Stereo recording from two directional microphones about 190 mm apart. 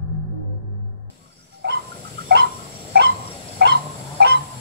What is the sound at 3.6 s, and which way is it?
Goose, 60° right (ahead or behind).